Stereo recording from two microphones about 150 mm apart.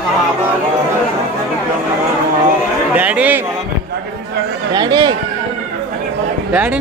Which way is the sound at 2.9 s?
10° right (ahead or behind).